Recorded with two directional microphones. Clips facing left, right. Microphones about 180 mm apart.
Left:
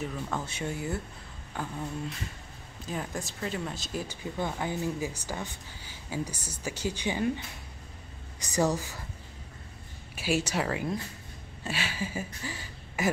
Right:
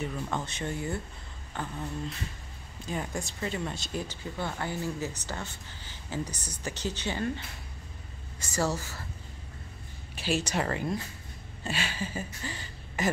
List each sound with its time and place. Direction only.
0.0 s speech: centre (ahead or behind)
10.1 s speech: 10° left (ahead or behind)
11.6 s a sound: 5° left (ahead or behind)